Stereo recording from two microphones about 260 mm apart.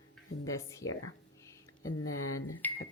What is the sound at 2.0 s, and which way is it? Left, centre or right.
Speech, left.